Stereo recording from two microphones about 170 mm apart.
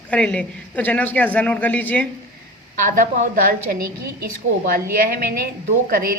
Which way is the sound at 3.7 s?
60° right (ahead or behind).